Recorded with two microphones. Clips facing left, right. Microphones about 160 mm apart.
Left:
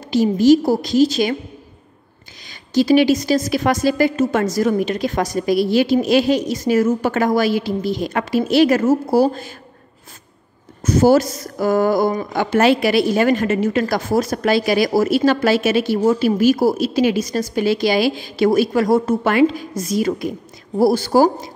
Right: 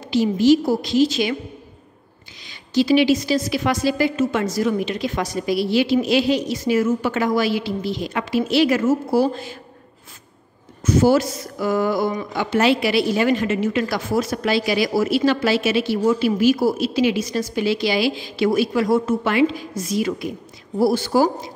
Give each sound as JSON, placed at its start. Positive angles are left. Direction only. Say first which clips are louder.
{"t": 0.1, "sound": "a woman's voice", "louder": "left 3 dB", "side_deg": 45}
{"t": 2.4, "sound": "a woman's voice", "louder": "left 2 dB", "side_deg": 45}
{"t": 10.8, "sound": "a woman's voice", "louder": "left 3 dB", "side_deg": 40}